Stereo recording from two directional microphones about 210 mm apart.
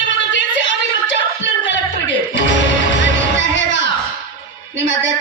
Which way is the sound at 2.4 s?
60° left (ahead or behind).